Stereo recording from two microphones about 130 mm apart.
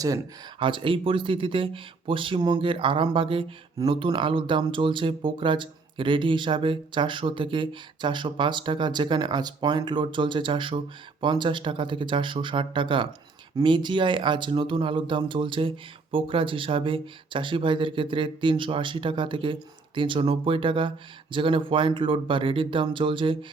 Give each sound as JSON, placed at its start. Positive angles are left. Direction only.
{"t": 0.6, "sound": "speech", "side_deg": -40}